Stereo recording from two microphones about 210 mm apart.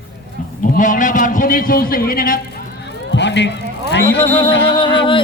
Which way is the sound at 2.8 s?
55° left (ahead or behind).